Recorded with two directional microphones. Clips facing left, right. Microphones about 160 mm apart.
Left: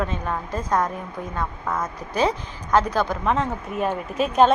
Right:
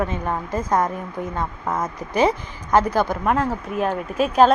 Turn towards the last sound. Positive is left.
turn(degrees=0)  # may be behind; listen again after turning